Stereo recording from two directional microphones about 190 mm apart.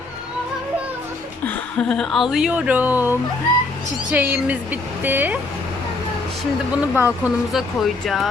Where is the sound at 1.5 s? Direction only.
5° left (ahead or behind); by 5.4 s 10° right (ahead or behind).